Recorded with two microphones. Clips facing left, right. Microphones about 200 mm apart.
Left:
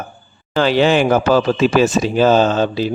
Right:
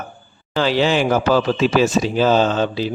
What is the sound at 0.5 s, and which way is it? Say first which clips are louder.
A man's voice: left 4 dB; 55° left (ahead or behind).